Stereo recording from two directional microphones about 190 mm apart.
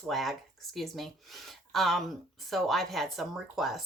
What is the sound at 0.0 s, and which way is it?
Speech, centre (ahead or behind).